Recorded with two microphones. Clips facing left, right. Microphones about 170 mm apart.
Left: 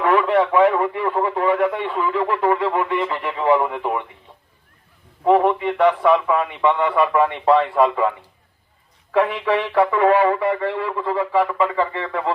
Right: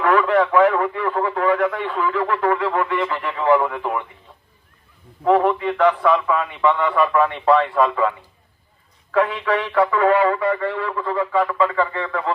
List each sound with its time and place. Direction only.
0.0 s a man's voice: 20° left (ahead or behind)
5.2 s a man's voice: 15° left (ahead or behind)
9.1 s a man's voice: 25° left (ahead or behind)